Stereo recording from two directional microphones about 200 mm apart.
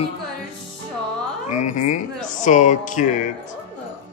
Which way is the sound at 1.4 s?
40° left (ahead or behind).